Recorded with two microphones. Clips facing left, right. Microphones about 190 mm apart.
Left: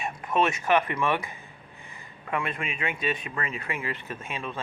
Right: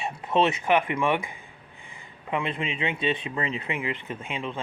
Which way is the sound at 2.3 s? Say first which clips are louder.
Right 2 dB; 20° right (ahead or behind).